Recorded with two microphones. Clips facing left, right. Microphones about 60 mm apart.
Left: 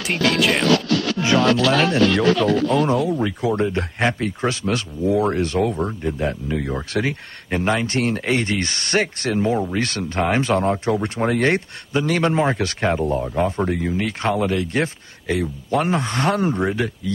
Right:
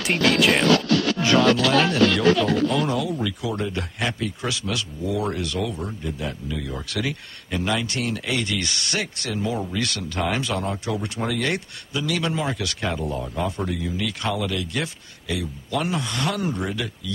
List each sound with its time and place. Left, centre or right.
0.0 s speech: centre
1.2 s speech: left